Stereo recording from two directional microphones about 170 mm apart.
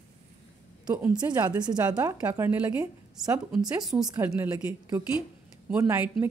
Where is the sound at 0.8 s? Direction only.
5° right (ahead or behind).